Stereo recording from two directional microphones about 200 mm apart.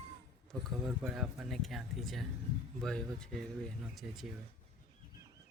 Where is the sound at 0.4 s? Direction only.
Centre (ahead or behind).